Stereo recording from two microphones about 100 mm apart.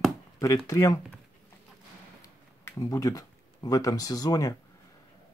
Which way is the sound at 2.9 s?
35° left (ahead or behind).